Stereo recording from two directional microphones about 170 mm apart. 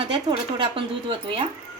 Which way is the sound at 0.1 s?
25° right (ahead or behind).